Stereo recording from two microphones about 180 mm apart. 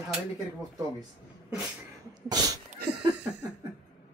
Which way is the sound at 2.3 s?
20° right (ahead or behind).